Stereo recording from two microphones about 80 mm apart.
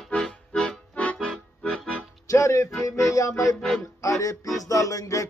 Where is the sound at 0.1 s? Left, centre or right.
Centre.